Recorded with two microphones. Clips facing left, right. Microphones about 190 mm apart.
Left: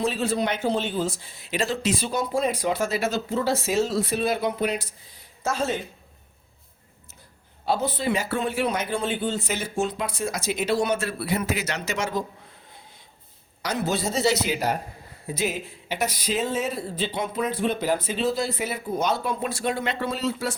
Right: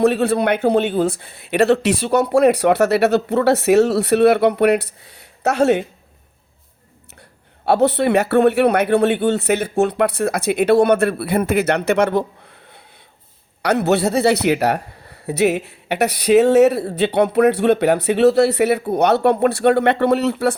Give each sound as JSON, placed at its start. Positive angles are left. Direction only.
{"t": 0.0, "sound": "a man's voice", "side_deg": -60}
{"t": 7.6, "sound": "a man's voice", "side_deg": -70}
{"t": 13.6, "sound": "a man's voice", "side_deg": -65}